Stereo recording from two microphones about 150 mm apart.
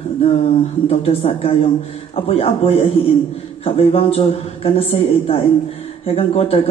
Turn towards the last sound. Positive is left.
turn(degrees=40)  # may be behind; listen again after turning